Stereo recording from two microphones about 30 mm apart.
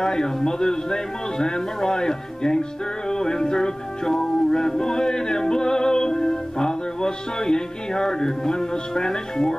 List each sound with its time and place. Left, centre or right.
0.0 s a man's voice: left
3.1 s music: left